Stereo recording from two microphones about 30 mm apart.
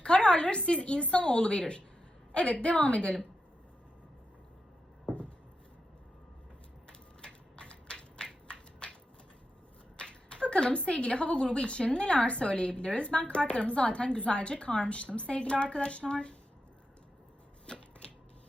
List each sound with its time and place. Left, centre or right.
0.0 s a woman's voice: left
6.8 s typewriter: left
8.8 s shuffling cards: left
10.0 s a woman's voice: left
17.7 s chopping: left